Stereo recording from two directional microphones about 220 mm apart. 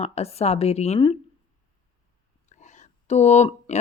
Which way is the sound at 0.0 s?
30° left (ahead or behind).